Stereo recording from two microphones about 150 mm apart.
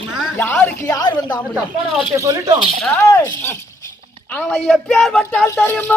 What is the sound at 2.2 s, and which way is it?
Speech, 20° right (ahead or behind).